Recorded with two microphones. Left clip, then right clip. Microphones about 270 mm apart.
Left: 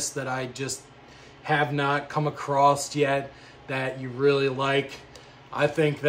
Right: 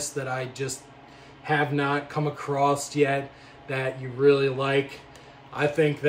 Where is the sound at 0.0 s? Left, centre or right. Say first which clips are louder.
Even; centre.